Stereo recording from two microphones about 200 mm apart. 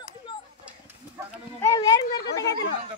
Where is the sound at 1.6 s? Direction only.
15° left (ahead or behind).